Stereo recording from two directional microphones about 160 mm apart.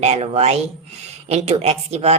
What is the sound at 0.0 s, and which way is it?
Speech, 40° right (ahead or behind).